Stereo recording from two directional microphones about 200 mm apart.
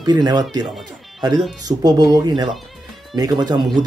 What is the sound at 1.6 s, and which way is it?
Speech, 20° right (ahead or behind).